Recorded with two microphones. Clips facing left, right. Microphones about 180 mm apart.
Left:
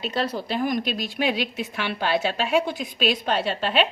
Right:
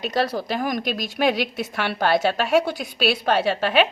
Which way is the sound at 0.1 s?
45° right (ahead or behind).